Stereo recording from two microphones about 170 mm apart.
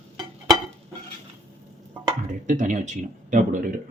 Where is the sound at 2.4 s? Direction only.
45° right (ahead or behind).